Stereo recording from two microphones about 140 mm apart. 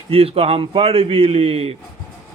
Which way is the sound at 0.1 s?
45° right (ahead or behind).